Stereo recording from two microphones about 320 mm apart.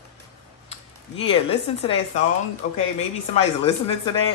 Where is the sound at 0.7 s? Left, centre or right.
Centre.